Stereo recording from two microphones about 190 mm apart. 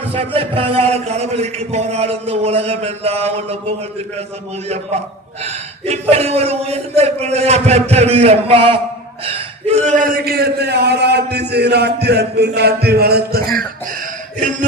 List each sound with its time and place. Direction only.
0.1 s a man's voice: 30° right (ahead or behind)
5.5 s a man's voice: 35° right (ahead or behind); by 13.6 s 50° right (ahead or behind)